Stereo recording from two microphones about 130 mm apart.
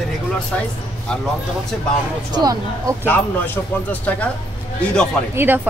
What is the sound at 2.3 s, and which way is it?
Speech, 30° right (ahead or behind).